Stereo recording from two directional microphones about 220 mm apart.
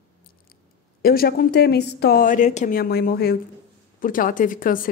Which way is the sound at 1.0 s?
45° left (ahead or behind).